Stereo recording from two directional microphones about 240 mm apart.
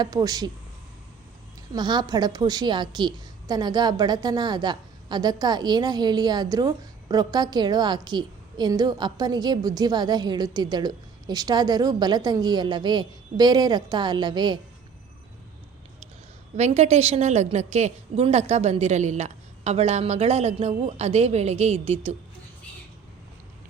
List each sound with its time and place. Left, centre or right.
0.0 s a woman's voice: centre
1.7 s a woman's voice: centre
16.6 s a woman's voice: right